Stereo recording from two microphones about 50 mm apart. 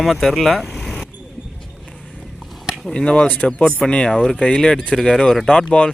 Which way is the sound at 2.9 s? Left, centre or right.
Centre.